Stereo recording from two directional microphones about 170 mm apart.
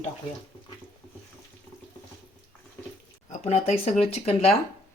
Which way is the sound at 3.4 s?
40° left (ahead or behind).